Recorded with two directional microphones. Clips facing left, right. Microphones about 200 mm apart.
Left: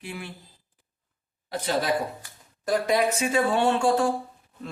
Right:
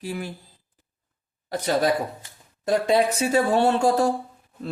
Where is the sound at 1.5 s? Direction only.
45° right (ahead or behind).